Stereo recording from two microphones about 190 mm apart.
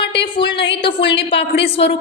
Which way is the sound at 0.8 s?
25° left (ahead or behind).